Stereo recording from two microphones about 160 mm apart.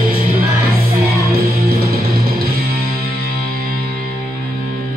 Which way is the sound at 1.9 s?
70° right (ahead or behind).